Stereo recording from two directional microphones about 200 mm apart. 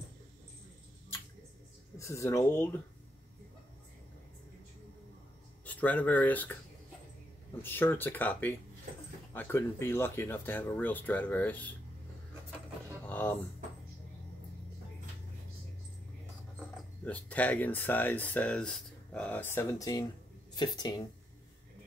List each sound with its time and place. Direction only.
2.0 s speech: 15° left (ahead or behind)
5.7 s speech: 5° left (ahead or behind)
7.6 s speech: 10° left (ahead or behind)
13.0 s a sound: 10° left (ahead or behind)
17.0 s speech: 10° left (ahead or behind)